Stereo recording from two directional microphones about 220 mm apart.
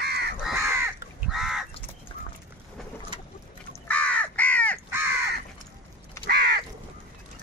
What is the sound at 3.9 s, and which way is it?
Crow, 5° left (ahead or behind).